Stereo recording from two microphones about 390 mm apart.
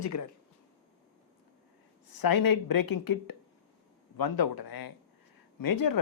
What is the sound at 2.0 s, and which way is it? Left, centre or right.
Speech, left.